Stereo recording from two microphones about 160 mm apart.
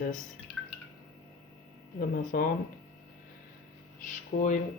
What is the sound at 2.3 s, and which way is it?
Speech, 60° left (ahead or behind).